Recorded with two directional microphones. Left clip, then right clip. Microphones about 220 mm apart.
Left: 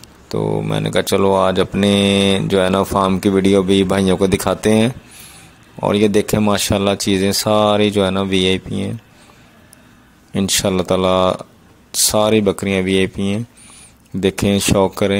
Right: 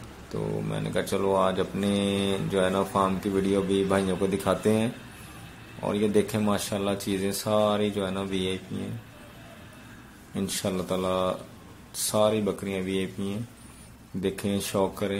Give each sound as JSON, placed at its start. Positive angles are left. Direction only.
{"t": 0.3, "sound": "speech", "side_deg": 45}
{"t": 10.3, "sound": "speech", "side_deg": 40}